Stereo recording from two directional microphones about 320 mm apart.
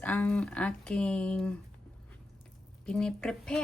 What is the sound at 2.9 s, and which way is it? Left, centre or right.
Speech, centre.